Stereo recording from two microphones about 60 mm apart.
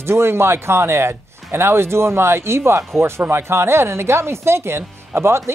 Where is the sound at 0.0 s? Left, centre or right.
Right.